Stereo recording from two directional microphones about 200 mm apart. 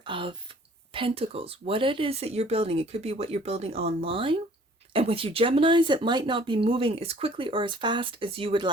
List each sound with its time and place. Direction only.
0.0 s speech: 25° right (ahead or behind)